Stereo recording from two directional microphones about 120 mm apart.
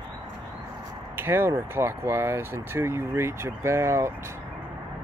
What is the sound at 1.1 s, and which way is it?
Speech, 20° right (ahead or behind).